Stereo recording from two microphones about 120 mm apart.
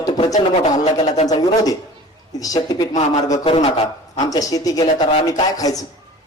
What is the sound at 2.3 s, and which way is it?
Speech, 30° left (ahead or behind).